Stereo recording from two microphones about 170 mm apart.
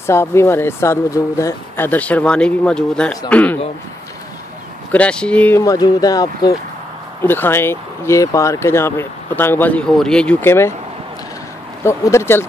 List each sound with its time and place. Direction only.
0.0 s speech: 15° left (ahead or behind)
4.9 s speech: 5° left (ahead or behind)
5.6 s speech: 20° left (ahead or behind)
7.2 s speech: 10° left (ahead or behind)
11.8 s speech: 15° left (ahead or behind)